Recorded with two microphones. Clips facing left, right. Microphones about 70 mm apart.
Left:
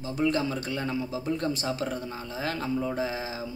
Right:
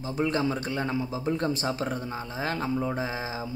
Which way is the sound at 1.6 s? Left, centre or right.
Right.